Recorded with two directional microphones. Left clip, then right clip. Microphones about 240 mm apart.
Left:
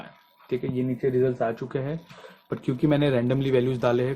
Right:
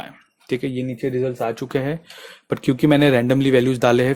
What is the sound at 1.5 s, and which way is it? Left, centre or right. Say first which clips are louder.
Speech: right 7 dB; right.